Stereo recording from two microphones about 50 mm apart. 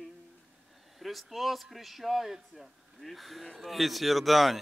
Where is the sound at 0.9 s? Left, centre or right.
Centre.